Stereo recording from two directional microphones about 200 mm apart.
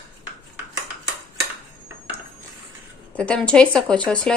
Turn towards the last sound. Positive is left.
turn(degrees=5)  # may be behind; listen again after turning